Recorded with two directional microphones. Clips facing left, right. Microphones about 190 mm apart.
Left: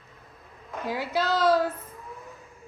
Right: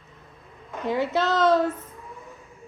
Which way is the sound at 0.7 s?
Centre (ahead or behind).